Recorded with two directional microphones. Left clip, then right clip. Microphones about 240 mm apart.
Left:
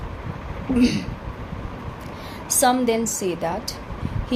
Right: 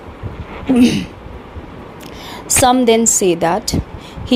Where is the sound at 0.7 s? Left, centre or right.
Right.